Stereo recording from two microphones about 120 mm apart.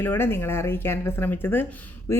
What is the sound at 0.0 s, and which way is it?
Speech, 20° left (ahead or behind).